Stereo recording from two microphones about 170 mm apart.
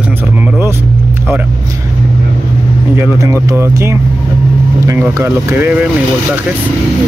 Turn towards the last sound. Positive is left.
turn(degrees=-10)  # may be behind; listen again after turning